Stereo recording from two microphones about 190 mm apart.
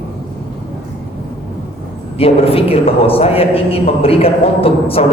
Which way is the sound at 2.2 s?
30° left (ahead or behind).